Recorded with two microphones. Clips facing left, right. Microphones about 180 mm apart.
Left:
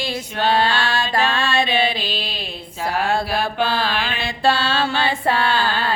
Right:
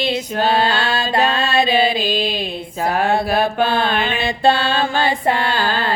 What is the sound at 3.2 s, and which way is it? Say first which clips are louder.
Mantra: right 4 dB; 50° right (ahead or behind).